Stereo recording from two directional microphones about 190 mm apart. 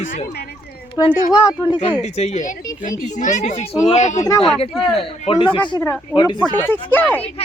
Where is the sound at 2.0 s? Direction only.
35° left (ahead or behind).